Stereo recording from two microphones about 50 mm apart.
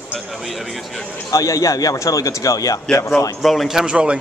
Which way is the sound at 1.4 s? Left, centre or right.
Left.